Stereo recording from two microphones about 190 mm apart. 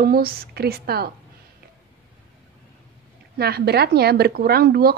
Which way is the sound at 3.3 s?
55° right (ahead or behind).